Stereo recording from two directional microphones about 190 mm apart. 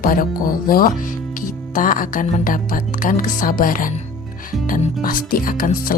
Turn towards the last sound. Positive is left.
turn(degrees=45)  # may be behind; listen again after turning